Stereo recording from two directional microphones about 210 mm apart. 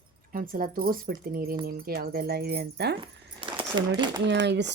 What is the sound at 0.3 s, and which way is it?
Speech, 40° right (ahead or behind).